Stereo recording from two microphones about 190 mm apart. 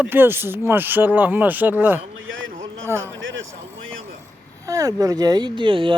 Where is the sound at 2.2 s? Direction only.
90° right.